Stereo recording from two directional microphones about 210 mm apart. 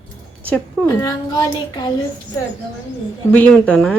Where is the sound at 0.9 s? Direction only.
20° left (ahead or behind).